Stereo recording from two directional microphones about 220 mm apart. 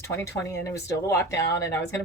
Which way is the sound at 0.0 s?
15° left (ahead or behind).